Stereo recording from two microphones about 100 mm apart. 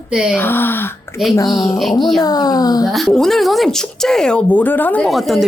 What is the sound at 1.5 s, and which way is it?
Speech, 40° left (ahead or behind).